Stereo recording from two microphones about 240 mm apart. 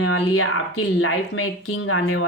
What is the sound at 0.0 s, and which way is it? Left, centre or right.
Speech, left.